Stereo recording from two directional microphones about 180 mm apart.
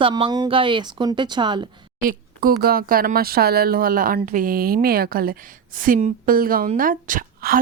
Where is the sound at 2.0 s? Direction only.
50° right (ahead or behind).